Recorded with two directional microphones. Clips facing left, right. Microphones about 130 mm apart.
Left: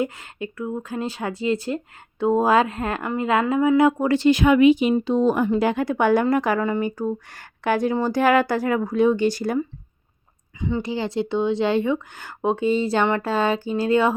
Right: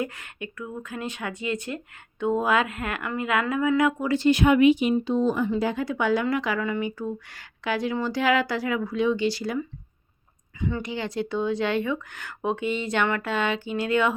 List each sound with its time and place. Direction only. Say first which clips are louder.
0.0 s speech: left 5 dB; 30° left (ahead or behind)
4.1 s speech: left 3 dB; 90° left; by 9.6 s 50° left (ahead or behind)
10.6 s speech: left 4 dB; 20° left (ahead or behind)
10.8 s speech: left 5 dB; 30° left (ahead or behind)